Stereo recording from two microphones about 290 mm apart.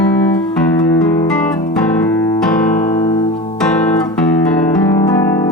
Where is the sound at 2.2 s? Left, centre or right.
Centre.